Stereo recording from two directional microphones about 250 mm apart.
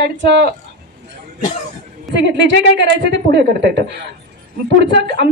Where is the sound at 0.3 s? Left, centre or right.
Right.